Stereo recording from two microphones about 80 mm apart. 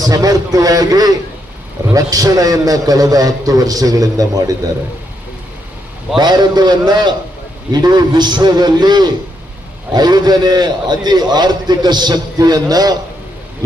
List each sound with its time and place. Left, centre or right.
0.0 s a man's voice: right
6.1 s a man's voice: right